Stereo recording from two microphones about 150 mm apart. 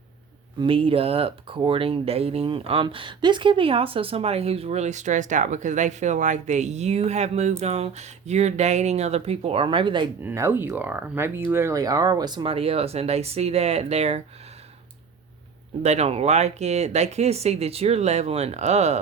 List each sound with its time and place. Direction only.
0.6 s speech: 35° right (ahead or behind)
10.2 s speech: 15° right (ahead or behind); by 14.2 s 45° right (ahead or behind)
15.8 s speech: 45° right (ahead or behind)